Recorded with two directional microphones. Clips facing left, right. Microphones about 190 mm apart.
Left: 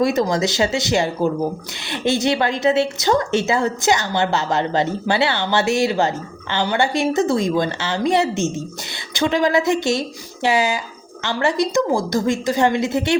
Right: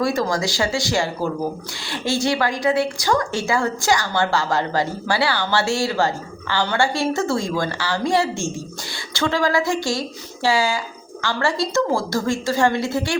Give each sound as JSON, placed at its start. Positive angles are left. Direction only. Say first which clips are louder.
{"t": 0.0, "sound": "speech", "louder": "left 3 dB", "side_deg": 20}